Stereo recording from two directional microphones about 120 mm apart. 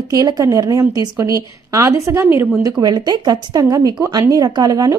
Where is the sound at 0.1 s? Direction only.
30° right (ahead or behind).